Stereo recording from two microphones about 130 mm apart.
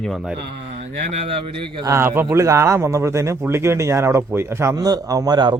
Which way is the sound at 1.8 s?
20° right (ahead or behind).